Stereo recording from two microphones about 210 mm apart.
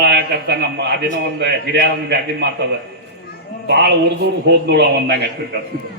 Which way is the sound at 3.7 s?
50° right (ahead or behind).